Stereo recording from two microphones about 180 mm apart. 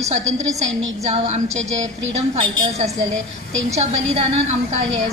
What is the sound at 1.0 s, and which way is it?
Speech, 40° right (ahead or behind).